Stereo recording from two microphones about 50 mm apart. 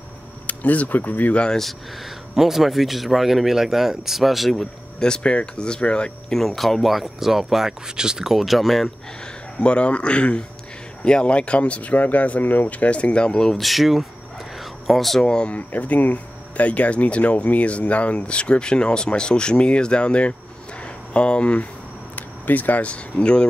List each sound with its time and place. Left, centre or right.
0.5 s speech: left
1.3 s speech: centre
2.3 s speech: centre
5.0 s speech: centre
6.3 s speech: centre
9.6 s speech: left
13.6 s speech: centre
14.6 s a sound: centre
15.2 s speech: centre
15.5 s speech: left
22.1 s speech: left